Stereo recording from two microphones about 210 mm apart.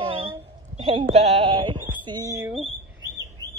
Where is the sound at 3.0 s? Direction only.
15° right (ahead or behind).